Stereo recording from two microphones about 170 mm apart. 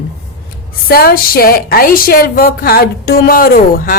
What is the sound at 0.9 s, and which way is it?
A woman's voice, 60° left (ahead or behind).